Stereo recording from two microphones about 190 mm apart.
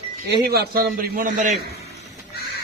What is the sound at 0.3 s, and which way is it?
A man's voice, 60° right (ahead or behind).